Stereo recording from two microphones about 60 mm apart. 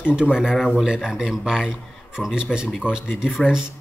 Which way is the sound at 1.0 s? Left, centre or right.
Centre.